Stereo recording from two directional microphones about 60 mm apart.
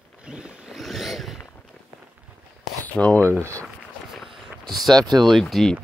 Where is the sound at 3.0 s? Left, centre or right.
Left.